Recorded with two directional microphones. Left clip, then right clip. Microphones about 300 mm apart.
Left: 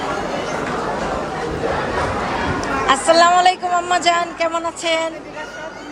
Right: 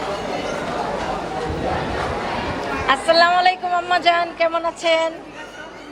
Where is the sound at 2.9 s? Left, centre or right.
Centre.